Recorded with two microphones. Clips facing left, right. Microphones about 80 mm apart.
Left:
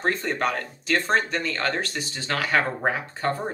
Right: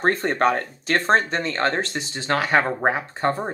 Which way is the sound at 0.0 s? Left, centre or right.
Right.